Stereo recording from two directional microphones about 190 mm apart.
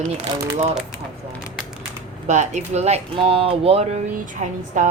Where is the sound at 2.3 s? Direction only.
40° right (ahead or behind).